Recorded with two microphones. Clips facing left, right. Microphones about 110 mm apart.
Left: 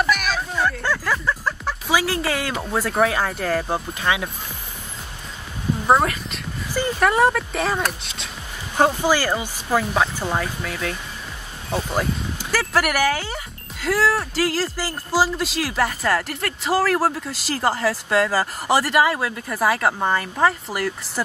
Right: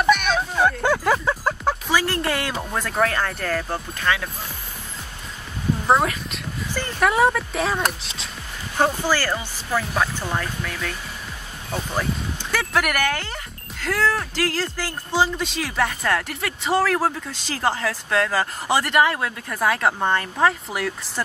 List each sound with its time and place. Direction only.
0.0 s music: centre (ahead or behind)
1.2 s music: 25° right (ahead or behind)
1.9 s speech: 5° left (ahead or behind)
5.9 s speech: centre (ahead or behind)
8.7 s speech: 15° left (ahead or behind)